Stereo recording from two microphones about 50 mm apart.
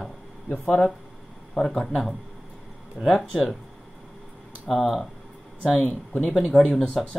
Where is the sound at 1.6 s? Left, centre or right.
Centre.